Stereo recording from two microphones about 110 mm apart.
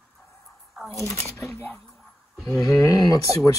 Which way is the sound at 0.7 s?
Centre (ahead or behind).